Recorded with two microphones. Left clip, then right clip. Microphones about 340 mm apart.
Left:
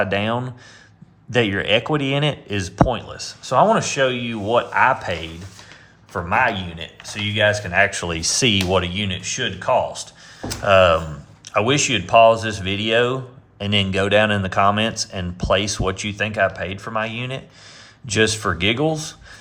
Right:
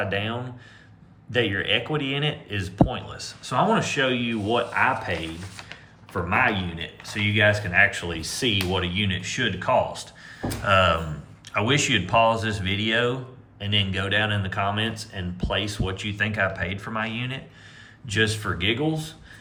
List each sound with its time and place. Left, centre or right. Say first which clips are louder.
0.0 s speech: left 7 dB; centre